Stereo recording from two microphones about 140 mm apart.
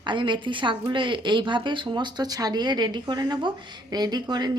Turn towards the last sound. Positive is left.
turn(degrees=-30)  # may be behind; listen again after turning